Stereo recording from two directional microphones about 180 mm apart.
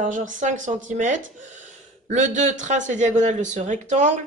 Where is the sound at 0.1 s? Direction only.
45° right (ahead or behind).